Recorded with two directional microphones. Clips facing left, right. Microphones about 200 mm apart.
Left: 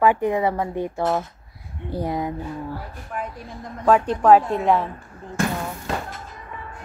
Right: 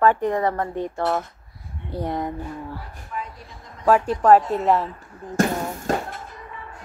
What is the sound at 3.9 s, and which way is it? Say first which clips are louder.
Speech: even; centre (ahead or behind).